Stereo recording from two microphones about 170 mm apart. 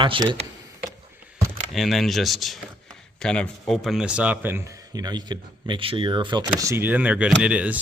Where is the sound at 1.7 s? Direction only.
Centre (ahead or behind).